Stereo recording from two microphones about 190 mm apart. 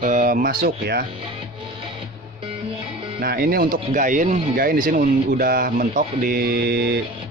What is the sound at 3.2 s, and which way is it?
Speech, 55° right (ahead or behind).